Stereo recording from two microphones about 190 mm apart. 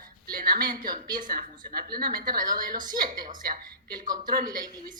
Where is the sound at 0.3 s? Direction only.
50° right (ahead or behind).